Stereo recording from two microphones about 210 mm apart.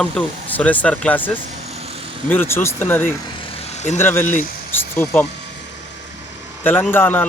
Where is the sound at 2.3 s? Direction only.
10° left (ahead or behind).